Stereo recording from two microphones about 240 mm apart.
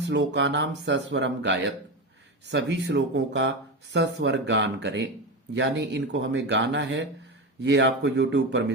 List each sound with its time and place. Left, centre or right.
0.0 s speech: right